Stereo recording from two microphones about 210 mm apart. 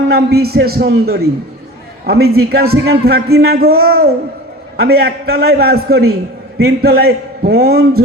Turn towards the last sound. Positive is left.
turn(degrees=-50)  # may be behind; listen again after turning